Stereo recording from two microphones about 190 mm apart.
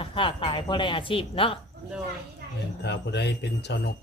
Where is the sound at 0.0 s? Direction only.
30° left (ahead or behind).